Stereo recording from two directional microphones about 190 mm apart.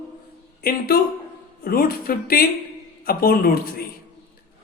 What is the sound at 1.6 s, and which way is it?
Speech, 50° left (ahead or behind).